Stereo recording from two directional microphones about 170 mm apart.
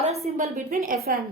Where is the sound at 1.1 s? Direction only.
60° right (ahead or behind).